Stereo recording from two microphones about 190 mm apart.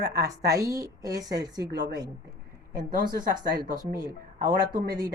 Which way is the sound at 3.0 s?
20° right (ahead or behind).